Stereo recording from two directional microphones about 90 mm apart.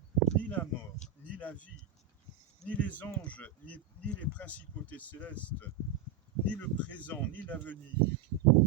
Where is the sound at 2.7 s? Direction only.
15° left (ahead or behind).